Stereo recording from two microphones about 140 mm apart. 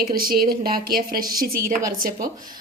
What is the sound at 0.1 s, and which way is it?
Speech, 90° right.